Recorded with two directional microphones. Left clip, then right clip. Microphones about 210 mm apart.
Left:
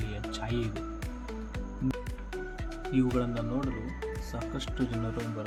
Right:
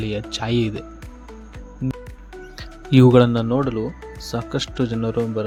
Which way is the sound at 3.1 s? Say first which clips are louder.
Right 16 dB; 45° right (ahead or behind).